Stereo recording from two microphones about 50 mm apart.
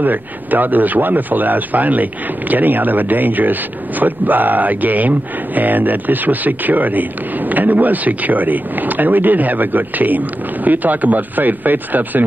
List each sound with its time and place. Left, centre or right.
0.0 s speech: right